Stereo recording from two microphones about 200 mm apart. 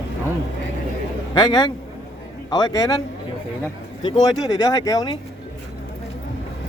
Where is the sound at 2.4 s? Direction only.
20° left (ahead or behind).